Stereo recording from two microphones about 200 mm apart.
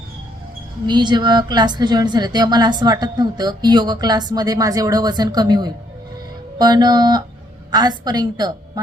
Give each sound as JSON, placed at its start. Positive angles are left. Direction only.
{"t": 0.9, "sound": "a woman's voice", "side_deg": -20}